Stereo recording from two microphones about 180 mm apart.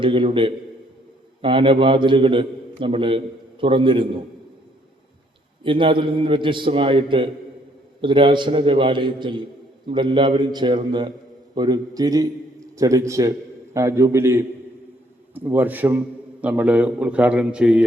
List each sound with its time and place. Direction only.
0.0 s a man's voice: 30° right (ahead or behind)
5.6 s a man's voice: 30° right (ahead or behind); by 17.8 s 5° right (ahead or behind)